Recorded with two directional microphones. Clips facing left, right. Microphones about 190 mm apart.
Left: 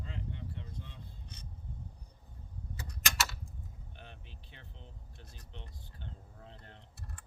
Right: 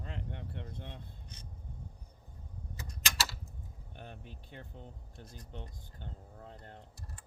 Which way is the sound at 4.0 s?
45° right (ahead or behind).